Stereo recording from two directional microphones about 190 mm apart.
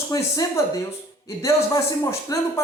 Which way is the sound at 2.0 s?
15° left (ahead or behind).